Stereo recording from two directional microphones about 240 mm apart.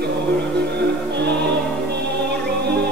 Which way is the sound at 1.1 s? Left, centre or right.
Right.